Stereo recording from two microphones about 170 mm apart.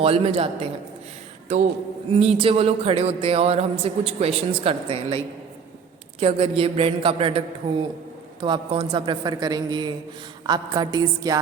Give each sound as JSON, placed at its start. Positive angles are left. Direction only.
{"t": 0.0, "sound": "music", "side_deg": -35}
{"t": 8.4, "sound": "a woman's voice", "side_deg": -25}